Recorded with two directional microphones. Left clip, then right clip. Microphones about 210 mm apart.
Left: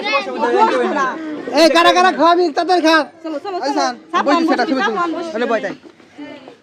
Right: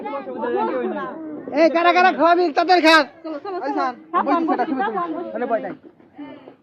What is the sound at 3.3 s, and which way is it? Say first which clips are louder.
A woman's voice: left 5 dB; 50° left (ahead or behind).